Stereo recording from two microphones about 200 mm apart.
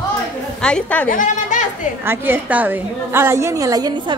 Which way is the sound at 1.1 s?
40° left (ahead or behind).